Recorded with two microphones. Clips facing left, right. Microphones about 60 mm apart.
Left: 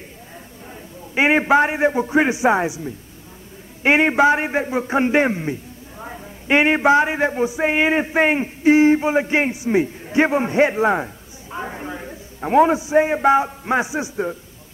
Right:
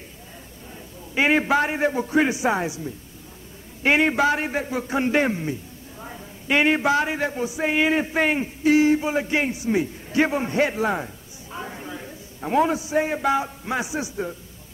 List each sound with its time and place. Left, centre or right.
1.1 s a man's voice: left